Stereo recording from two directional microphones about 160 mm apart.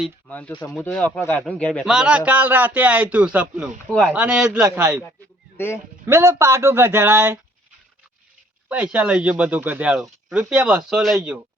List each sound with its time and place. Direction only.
0.3 s speech: 10° left (ahead or behind)
0.5 s speech: 25° left (ahead or behind)
0.8 s speech: 5° left (ahead or behind)
1.9 s speech: 5° right (ahead or behind)
3.8 s speech: 5° left (ahead or behind)
4.1 s a man's voice: 5° right (ahead or behind)
5.5 s speech: 15° left (ahead or behind)
6.1 s speech: 15° right (ahead or behind)
8.7 s speech: 10° right (ahead or behind)
10.8 s a man's voice: centre (ahead or behind)